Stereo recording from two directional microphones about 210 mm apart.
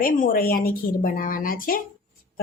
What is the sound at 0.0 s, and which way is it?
A woman's voice, 40° left (ahead or behind).